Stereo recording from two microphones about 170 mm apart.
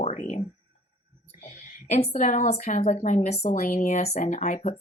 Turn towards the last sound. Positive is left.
turn(degrees=45)  # may be behind; listen again after turning